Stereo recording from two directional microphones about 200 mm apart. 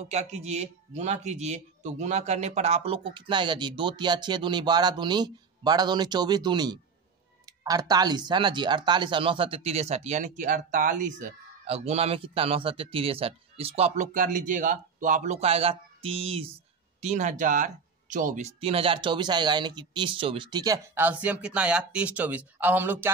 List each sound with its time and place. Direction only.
0.1 s speech: 35° right (ahead or behind); by 23.1 s 10° right (ahead or behind)